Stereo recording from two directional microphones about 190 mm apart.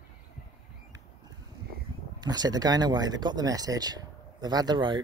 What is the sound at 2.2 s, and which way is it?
Speech, 20° right (ahead or behind).